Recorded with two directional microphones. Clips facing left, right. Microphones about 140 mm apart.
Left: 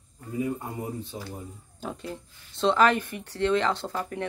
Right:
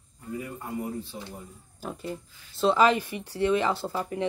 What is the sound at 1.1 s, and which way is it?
Speech, 25° left (ahead or behind).